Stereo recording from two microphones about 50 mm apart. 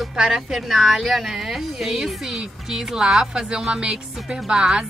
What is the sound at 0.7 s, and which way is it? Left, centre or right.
Speech, centre.